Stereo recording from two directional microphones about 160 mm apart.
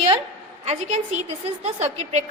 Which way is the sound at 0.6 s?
45° right (ahead or behind).